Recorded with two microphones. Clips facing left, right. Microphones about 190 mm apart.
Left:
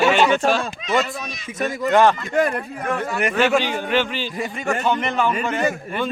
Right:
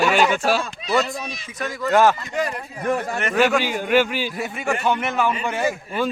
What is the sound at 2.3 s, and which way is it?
Speech, 55° left (ahead or behind).